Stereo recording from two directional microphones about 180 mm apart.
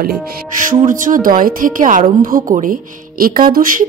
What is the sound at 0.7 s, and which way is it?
Speech, 45° right (ahead or behind).